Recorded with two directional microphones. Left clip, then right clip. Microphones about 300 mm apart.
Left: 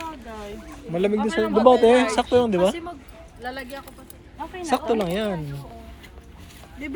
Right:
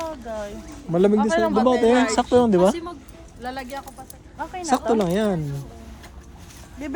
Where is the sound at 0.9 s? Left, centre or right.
Centre.